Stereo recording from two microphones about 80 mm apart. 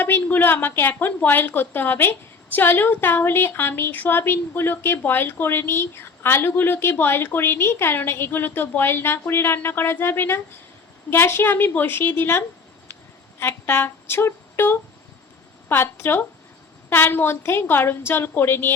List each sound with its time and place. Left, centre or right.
0.0 s a woman's voice: left
13.4 s a sound: left
15.7 s a woman's voice: left